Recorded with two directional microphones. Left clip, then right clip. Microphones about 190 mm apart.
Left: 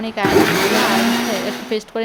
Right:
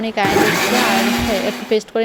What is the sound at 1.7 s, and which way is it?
Speech, 15° right (ahead or behind).